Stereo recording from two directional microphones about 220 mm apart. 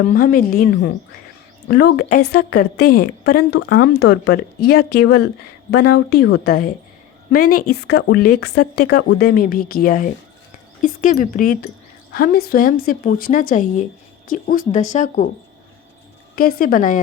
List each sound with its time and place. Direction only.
0.1 s a woman's voice: 40° left (ahead or behind)
2.8 s a woman's voice: 90° left
3.3 s a woman's voice: 45° left (ahead or behind)
16.3 s a woman's voice: 40° left (ahead or behind)